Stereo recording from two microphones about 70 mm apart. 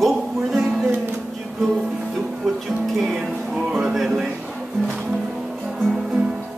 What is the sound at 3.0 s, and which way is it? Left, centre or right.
Music, centre.